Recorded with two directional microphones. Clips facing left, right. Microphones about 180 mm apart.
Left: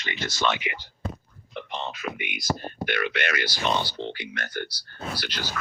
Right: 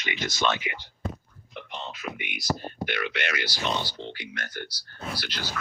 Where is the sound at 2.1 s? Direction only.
65° left (ahead or behind).